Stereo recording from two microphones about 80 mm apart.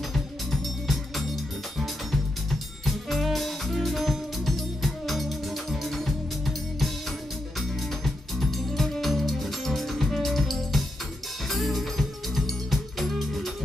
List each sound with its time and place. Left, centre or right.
0.1 s music: centre
2.8 s music: centre
8.0 s music: centre